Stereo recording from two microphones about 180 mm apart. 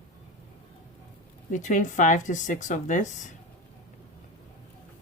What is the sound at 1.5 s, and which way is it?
Speech, 45° left (ahead or behind).